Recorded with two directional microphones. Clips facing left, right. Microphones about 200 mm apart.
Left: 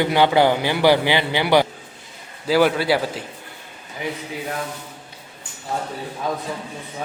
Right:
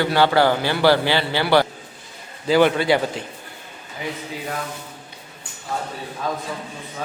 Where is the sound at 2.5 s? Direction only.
5° left (ahead or behind).